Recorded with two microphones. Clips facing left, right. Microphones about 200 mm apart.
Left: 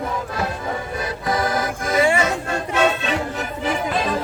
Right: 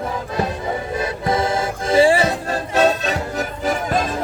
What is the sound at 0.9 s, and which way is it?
Music, 25° right (ahead or behind).